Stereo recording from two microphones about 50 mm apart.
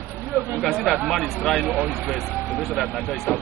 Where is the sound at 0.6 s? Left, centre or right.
Centre.